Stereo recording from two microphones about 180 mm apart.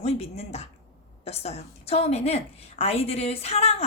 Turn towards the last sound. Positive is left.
turn(degrees=35)  # may be behind; listen again after turning